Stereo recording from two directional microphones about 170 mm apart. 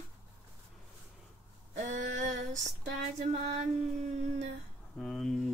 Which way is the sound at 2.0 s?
45° right (ahead or behind).